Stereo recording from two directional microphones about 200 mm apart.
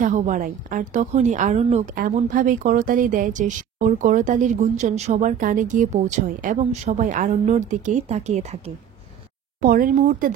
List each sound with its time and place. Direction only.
0.0 s speech: 40° right (ahead or behind)